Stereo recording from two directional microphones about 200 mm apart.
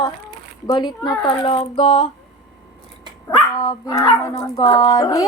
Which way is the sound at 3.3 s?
20° left (ahead or behind).